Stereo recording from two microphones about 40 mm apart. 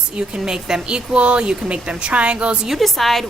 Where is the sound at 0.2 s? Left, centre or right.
Centre.